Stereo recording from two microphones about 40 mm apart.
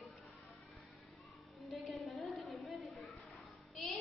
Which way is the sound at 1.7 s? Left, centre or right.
Centre.